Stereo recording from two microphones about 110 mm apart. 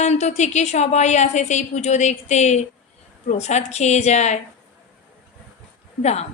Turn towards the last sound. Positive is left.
turn(degrees=80)